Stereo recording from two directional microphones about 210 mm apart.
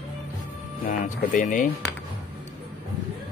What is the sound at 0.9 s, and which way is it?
Speech, 40° left (ahead or behind).